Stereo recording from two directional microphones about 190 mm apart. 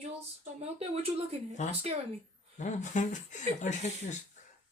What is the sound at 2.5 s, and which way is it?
Speech, 40° left (ahead or behind).